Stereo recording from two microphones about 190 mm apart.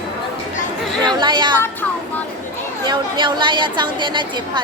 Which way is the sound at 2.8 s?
25° right (ahead or behind).